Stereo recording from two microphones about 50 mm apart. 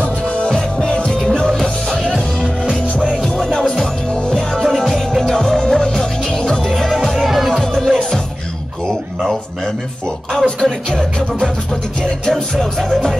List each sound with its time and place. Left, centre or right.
0.8 s music: centre
2.6 s music: centre
3.5 s music: centre
7.5 s music: centre
10.3 s music: centre